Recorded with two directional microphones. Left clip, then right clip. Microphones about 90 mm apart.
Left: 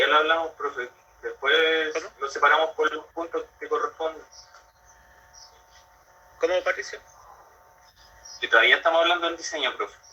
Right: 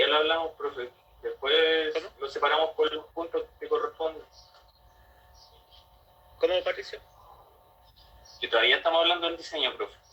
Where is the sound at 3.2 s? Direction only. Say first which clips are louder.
Left 1 dB; 35° right (ahead or behind).